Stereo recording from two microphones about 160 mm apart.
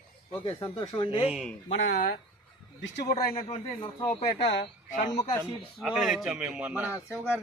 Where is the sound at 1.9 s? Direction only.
65° left (ahead or behind).